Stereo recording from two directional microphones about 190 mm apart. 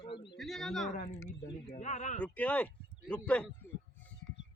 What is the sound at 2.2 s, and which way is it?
Speech, 5° left (ahead or behind).